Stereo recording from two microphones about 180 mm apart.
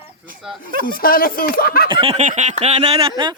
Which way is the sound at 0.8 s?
55° left (ahead or behind).